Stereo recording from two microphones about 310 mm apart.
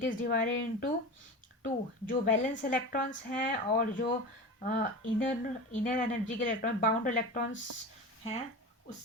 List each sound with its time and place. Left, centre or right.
0.0 s a woman's voice: left